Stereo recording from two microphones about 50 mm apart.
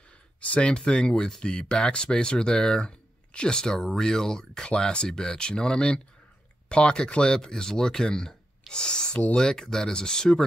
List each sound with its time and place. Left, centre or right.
0.4 s speech: left